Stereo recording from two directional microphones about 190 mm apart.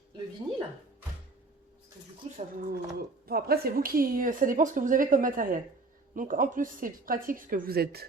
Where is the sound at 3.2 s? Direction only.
55° right (ahead or behind).